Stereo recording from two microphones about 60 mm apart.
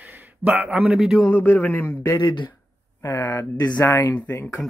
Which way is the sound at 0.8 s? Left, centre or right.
Centre.